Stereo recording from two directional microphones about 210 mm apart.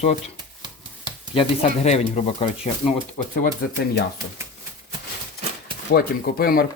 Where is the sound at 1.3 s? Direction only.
30° left (ahead or behind).